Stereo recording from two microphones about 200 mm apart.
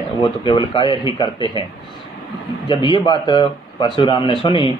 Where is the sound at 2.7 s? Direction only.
25° left (ahead or behind).